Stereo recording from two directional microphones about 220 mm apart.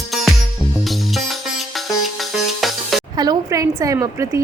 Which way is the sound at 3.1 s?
15° right (ahead or behind).